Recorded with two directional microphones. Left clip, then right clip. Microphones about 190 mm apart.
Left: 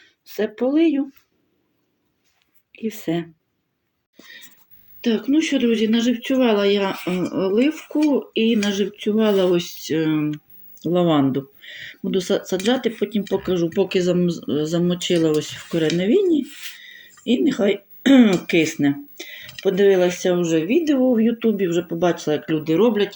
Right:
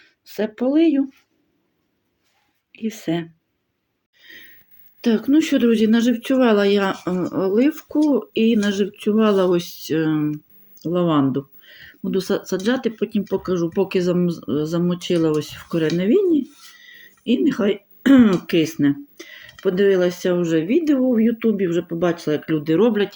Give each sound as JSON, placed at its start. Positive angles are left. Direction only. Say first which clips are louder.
{"t": 0.0, "sound": "speech", "louder": "left 1 dB", "side_deg": -5}
{"t": 2.7, "sound": "speech", "louder": "even", "side_deg": 0}
{"t": 4.2, "sound": "a sound", "louder": "even", "side_deg": -15}
{"t": 4.9, "sound": "speech", "louder": "right 2 dB", "side_deg": -15}
{"t": 12.1, "sound": "speech", "louder": "left 1 dB", "side_deg": -15}